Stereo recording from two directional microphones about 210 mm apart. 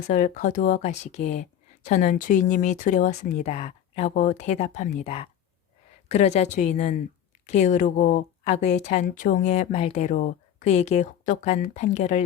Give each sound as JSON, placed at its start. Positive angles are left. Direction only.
{"t": 0.1, "sound": "speech", "side_deg": 35}